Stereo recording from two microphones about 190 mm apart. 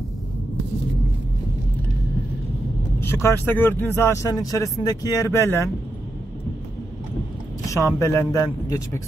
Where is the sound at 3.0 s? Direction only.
15° left (ahead or behind).